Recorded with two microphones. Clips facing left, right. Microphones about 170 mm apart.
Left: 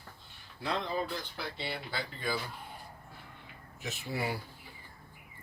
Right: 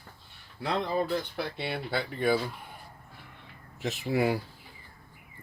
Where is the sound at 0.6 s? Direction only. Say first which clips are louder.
Right 5 dB; 60° right (ahead or behind).